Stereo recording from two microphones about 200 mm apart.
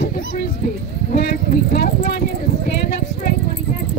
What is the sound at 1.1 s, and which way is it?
Clip-clop, 50° left (ahead or behind).